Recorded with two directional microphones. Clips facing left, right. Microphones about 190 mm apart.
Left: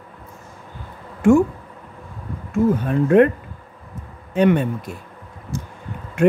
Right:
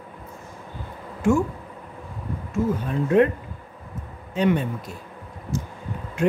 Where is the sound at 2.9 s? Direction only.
60° left (ahead or behind).